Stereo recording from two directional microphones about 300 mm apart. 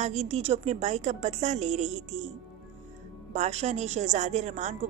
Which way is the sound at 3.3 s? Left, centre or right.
Right.